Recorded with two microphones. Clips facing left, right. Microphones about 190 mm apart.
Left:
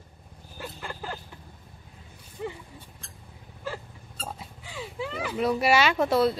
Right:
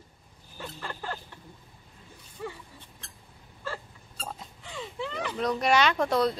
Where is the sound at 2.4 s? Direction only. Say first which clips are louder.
Left 3 dB; 20° left (ahead or behind).